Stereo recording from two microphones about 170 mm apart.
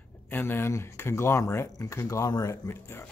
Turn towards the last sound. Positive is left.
turn(degrees=15)  # may be behind; listen again after turning